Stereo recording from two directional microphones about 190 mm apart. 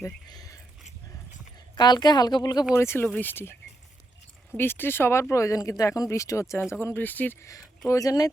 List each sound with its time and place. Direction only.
0.0 s speech: 20° left (ahead or behind)
1.7 s speech: 20° left (ahead or behind)
4.5 s speech: 10° left (ahead or behind)